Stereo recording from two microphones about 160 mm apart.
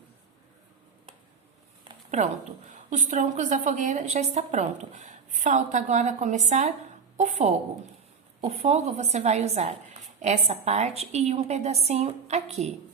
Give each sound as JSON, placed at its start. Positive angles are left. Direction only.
{"t": 2.0, "sound": "a woman's voice", "side_deg": -45}